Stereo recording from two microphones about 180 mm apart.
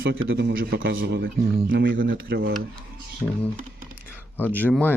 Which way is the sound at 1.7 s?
80° right.